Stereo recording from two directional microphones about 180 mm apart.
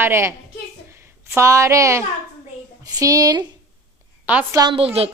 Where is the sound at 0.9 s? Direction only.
15° right (ahead or behind).